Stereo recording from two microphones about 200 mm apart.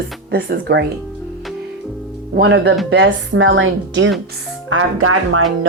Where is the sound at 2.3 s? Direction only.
55° right (ahead or behind).